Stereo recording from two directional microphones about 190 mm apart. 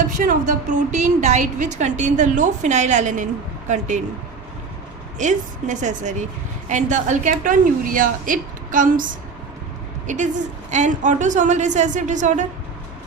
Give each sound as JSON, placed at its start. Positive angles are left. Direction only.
{"t": 0.2, "sound": "a woman's voice", "side_deg": -45}
{"t": 5.1, "sound": "a woman's voice", "side_deg": -40}
{"t": 10.1, "sound": "a woman's voice", "side_deg": -40}